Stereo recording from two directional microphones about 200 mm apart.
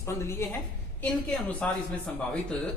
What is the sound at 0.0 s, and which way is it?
A woman's voice, 15° left (ahead or behind).